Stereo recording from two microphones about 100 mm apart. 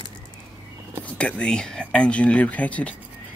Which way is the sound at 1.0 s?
15° left (ahead or behind).